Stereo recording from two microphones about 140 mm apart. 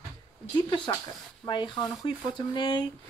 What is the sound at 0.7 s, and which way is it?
Speech, 30° left (ahead or behind).